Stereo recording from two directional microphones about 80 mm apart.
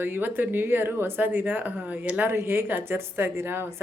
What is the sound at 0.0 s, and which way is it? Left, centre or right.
A woman's voice, right.